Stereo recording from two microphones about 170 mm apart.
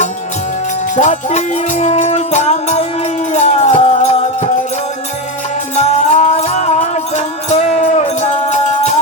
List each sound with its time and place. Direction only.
0.9 s music: 45° left (ahead or behind)
5.7 s music: 40° left (ahead or behind)